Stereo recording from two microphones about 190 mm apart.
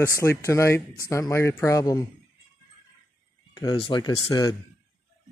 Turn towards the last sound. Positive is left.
turn(degrees=20)  # may be behind; listen again after turning